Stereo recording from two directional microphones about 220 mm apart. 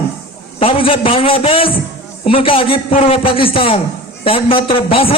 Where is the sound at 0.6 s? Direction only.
25° left (ahead or behind).